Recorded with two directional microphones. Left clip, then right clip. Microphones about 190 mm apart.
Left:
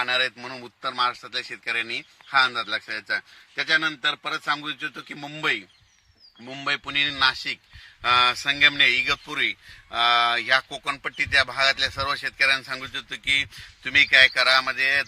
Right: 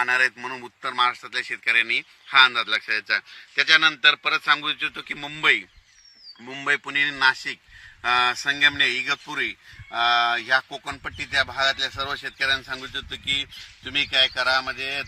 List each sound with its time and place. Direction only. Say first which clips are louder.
0.0 s speech: right 3 dB; 55° left (ahead or behind)
0.9 s speech: right 3 dB; 80° left
3.7 s a man's voice: right 6 dB; 60° left (ahead or behind)
6.4 s a man's voice: right 3 dB; 55° left (ahead or behind); by 15.0 s 10° left (ahead or behind)